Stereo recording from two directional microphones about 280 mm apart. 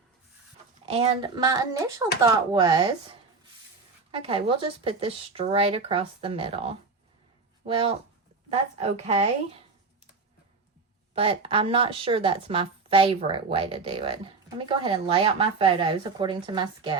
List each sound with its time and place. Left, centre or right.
0.9 s speech: centre
4.1 s a woman's voice: centre
11.1 s a woman's voice: centre